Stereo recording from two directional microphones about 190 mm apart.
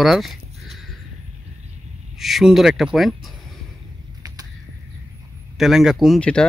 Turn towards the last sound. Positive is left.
turn(degrees=5)  # may be behind; listen again after turning